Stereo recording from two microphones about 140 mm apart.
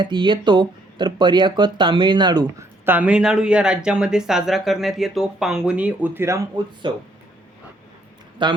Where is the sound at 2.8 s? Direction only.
10° right (ahead or behind).